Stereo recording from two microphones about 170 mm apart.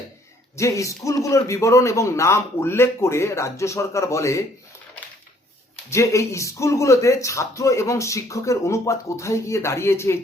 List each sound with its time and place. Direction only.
0.5 s speech: 15° left (ahead or behind)
5.9 s speech: 15° left (ahead or behind)